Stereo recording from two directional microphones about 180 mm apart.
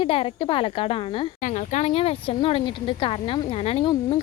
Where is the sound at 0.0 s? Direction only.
30° left (ahead or behind).